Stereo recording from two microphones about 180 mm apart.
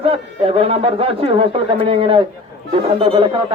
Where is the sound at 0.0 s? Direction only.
30° right (ahead or behind).